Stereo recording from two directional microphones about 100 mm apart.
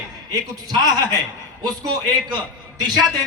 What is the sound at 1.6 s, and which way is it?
Speech, 45° right (ahead or behind).